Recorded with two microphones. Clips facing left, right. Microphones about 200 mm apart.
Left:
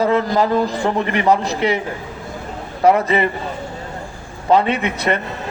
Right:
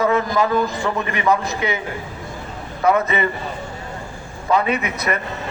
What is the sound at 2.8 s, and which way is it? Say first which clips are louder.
Speech: left 3 dB; 30° left (ahead or behind).